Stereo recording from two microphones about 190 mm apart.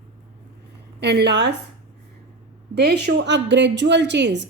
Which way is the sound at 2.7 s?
60° right (ahead or behind).